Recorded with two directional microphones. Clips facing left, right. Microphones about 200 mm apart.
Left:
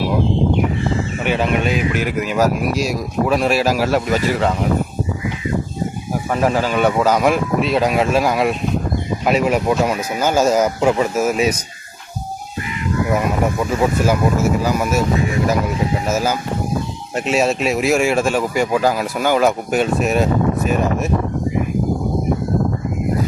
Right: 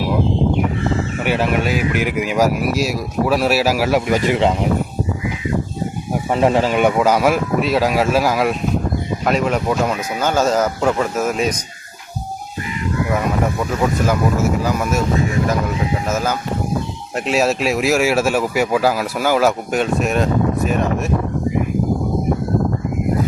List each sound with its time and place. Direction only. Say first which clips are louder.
1.2 s speech: even; 5° right (ahead or behind)
6.3 s speech: right 2 dB; 25° right (ahead or behind)
6.8 s speech: left 2 dB; 10° right (ahead or behind); by 11.5 s 5° left (ahead or behind)
14.6 s speech: left 1 dB; 5° left (ahead or behind)
16.0 s speech: left 1 dB; 5° left (ahead or behind)